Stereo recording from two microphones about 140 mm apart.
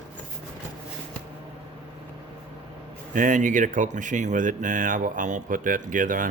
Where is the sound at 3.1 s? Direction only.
70° right (ahead or behind).